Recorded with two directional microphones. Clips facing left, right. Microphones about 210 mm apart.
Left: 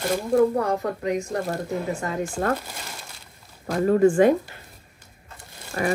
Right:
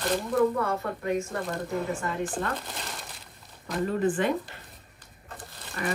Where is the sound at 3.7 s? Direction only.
45° left (ahead or behind).